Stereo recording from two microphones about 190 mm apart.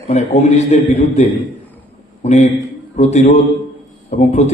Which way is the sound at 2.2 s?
40° left (ahead or behind).